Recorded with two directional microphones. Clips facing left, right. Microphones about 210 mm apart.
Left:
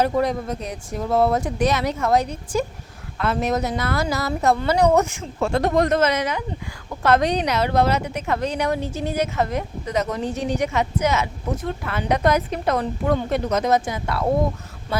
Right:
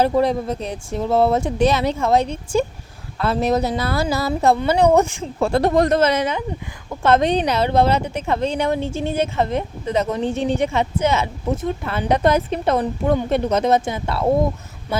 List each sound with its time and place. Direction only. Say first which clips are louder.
0.0 s speech: right 3 dB; 30° right (ahead or behind)